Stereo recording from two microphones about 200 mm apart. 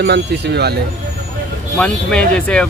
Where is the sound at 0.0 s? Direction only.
55° right (ahead or behind).